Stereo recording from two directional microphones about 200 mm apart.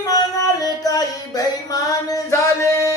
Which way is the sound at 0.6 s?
20° left (ahead or behind).